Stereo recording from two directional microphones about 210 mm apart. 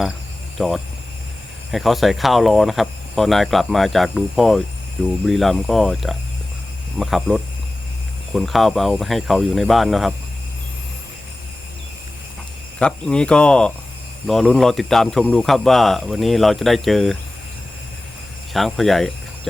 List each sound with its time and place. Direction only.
0.6 s speech: centre (ahead or behind)
12.8 s speech: 5° left (ahead or behind)
18.5 s speech: centre (ahead or behind)